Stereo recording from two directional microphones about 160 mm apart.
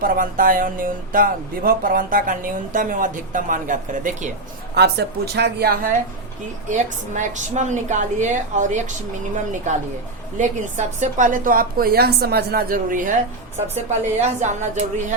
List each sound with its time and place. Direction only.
0.0 s speech: 60° right (ahead or behind)
4.7 s speech: 90° right
6.7 s a woman's voice: 50° right (ahead or behind)
10.3 s a woman's voice: 50° right (ahead or behind)